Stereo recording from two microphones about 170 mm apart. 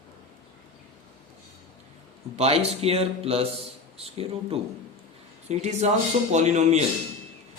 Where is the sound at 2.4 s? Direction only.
40° right (ahead or behind).